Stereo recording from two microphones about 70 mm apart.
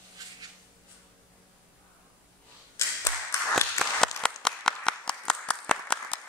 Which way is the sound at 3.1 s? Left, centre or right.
Left.